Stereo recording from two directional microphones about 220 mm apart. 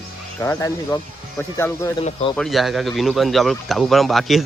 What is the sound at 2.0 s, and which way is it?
Speech, 25° left (ahead or behind).